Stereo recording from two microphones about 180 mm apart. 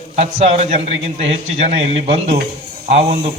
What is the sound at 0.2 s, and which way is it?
A man's voice, 35° right (ahead or behind).